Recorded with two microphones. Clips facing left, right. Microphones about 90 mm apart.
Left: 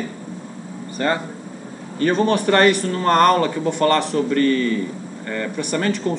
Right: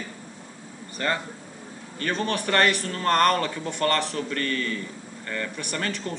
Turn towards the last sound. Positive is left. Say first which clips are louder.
# left 9 dB
turn(degrees=10)  # may be behind; listen again after turning